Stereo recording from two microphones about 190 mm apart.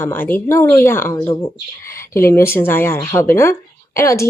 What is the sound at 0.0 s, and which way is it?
A woman's voice, 10° left (ahead or behind).